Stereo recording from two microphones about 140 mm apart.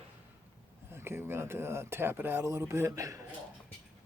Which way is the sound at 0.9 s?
15° right (ahead or behind).